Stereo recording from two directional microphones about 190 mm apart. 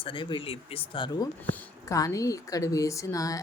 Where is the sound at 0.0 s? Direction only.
25° left (ahead or behind).